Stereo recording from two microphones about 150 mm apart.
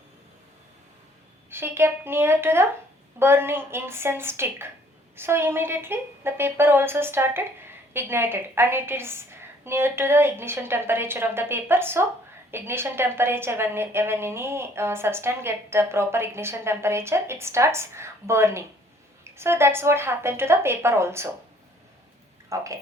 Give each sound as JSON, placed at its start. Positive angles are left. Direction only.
{"t": 1.5, "sound": "a woman's voice", "side_deg": -15}
{"t": 22.4, "sound": "speech", "side_deg": -20}